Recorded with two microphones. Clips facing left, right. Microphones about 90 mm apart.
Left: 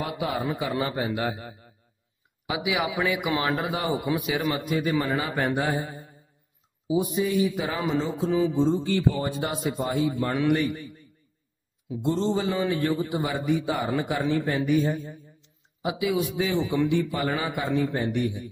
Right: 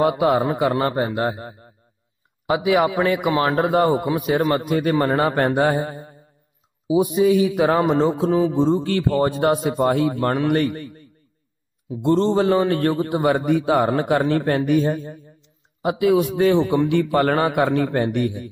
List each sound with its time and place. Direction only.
0.0 s a man's voice: 60° right (ahead or behind)
6.9 s a man's voice: 75° right (ahead or behind)
8.3 s a man's voice: 45° right (ahead or behind); by 10.3 s 65° right (ahead or behind)
10.3 s a man's voice: 55° right (ahead or behind)